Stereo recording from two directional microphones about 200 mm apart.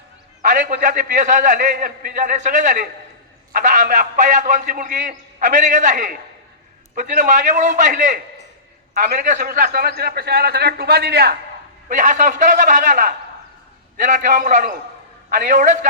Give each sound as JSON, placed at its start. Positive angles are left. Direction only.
{"t": 0.4, "sound": "a man's voice", "side_deg": -40}
{"t": 11.9, "sound": "a man's voice", "side_deg": -40}